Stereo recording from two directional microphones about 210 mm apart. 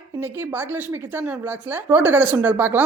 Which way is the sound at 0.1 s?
10° right (ahead or behind).